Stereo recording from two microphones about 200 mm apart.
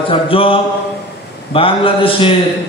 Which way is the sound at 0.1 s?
25° left (ahead or behind).